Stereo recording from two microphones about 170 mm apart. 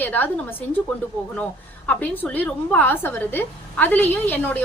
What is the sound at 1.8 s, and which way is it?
A woman's voice, 10° left (ahead or behind).